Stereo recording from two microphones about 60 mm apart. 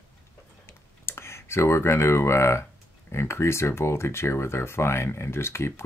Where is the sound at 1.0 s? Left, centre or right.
Left.